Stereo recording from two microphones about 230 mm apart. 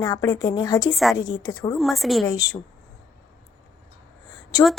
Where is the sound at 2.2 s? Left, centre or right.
Centre.